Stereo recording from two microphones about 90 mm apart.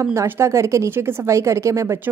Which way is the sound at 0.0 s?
30° right (ahead or behind).